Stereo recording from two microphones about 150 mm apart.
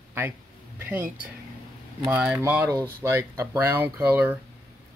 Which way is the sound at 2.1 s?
10° right (ahead or behind).